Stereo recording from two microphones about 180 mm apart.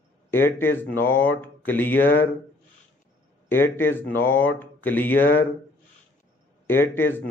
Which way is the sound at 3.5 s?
10° left (ahead or behind).